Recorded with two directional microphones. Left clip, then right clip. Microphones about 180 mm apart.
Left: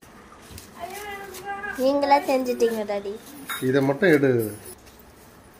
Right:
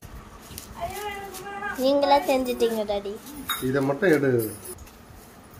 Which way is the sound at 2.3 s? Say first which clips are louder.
Left 1 dB; 10° right (ahead or behind).